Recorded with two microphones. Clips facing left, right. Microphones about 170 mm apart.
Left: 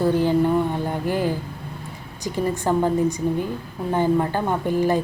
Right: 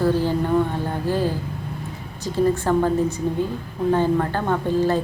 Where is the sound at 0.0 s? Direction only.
15° left (ahead or behind).